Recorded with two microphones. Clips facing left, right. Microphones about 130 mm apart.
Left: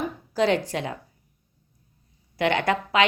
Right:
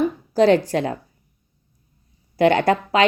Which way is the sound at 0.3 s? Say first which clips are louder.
Right 7 dB; 40° right (ahead or behind).